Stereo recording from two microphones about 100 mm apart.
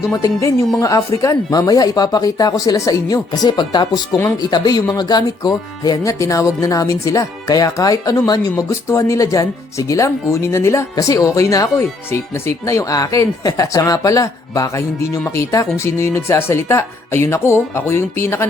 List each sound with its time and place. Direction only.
0.1 s speech: 30° left (ahead or behind)